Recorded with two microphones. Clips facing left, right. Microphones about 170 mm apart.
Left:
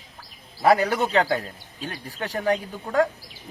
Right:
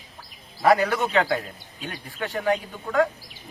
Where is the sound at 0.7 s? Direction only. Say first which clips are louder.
Left 1 dB; 30° left (ahead or behind).